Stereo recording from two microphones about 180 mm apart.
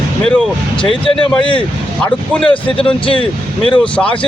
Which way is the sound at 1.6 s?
5° left (ahead or behind).